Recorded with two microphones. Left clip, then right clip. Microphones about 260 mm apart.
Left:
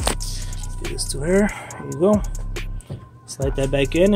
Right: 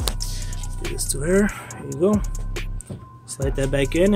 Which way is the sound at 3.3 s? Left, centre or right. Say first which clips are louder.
Left 2 dB; centre.